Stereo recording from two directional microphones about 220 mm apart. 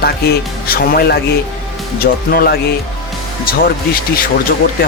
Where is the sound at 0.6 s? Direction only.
45° left (ahead or behind).